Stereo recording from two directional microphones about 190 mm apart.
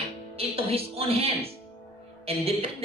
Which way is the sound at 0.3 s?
30° right (ahead or behind).